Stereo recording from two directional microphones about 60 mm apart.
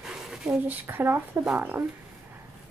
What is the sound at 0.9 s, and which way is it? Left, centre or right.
Speech, right.